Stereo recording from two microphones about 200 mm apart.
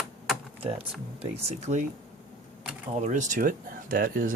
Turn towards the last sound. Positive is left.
turn(degrees=-45)  # may be behind; listen again after turning